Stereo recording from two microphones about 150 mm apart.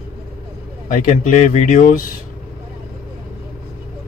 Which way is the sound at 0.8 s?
65° left (ahead or behind).